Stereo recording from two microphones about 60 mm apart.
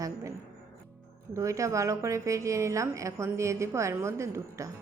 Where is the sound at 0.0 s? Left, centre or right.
Right.